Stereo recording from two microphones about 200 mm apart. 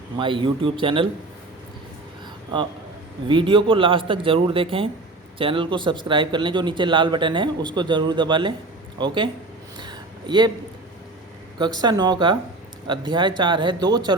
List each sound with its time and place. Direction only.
0.2 s speech: 25° right (ahead or behind)
3.2 s speech: 25° right (ahead or behind)
9.7 s a sound: 20° right (ahead or behind)
11.5 s speech: 20° right (ahead or behind)